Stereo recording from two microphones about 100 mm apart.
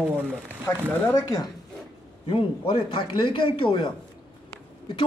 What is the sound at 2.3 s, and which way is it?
A man's voice, 60° left (ahead or behind).